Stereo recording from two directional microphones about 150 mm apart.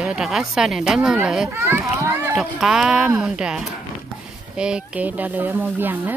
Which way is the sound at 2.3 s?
5° right (ahead or behind).